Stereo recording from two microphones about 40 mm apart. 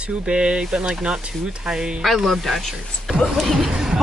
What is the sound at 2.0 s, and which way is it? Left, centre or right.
Speech, centre.